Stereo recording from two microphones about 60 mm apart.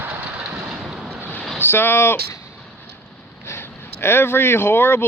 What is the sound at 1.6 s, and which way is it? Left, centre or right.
Speech, left.